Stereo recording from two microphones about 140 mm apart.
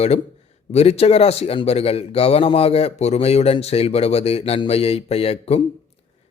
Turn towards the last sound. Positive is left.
turn(degrees=45)  # may be behind; listen again after turning